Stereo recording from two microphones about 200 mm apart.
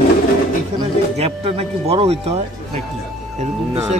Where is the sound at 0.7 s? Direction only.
30° right (ahead or behind).